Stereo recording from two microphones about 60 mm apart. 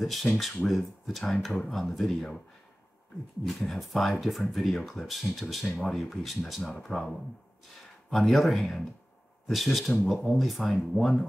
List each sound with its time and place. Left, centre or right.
0.0 s speech: centre
3.4 s speech: centre